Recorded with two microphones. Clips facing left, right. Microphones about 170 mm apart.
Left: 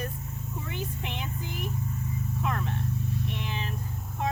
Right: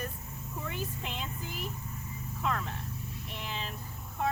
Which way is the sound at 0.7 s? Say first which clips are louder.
Left 2 dB; 20° left (ahead or behind).